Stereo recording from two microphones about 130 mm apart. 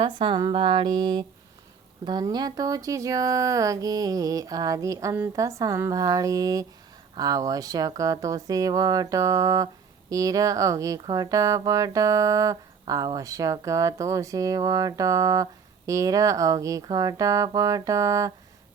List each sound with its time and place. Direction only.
0.0 s speech: 40° right (ahead or behind)